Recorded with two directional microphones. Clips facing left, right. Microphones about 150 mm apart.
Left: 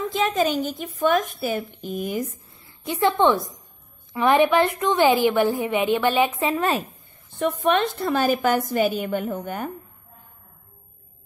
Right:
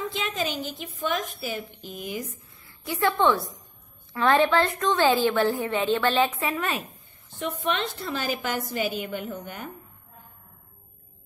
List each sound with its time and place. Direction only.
0.1 s a woman's voice: 45° left (ahead or behind)
2.6 s a woman's voice: 20° left (ahead or behind)
6.5 s speech: 35° left (ahead or behind)
7.3 s a woman's voice: 50° left (ahead or behind)